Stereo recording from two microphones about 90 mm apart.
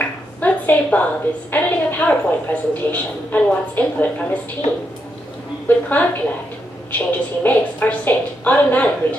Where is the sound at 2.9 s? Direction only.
15° left (ahead or behind).